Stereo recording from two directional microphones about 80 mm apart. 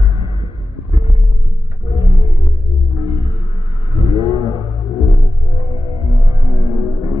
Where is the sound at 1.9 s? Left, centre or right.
Right.